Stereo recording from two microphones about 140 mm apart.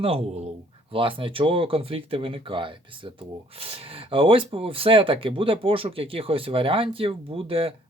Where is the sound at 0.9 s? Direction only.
40° right (ahead or behind).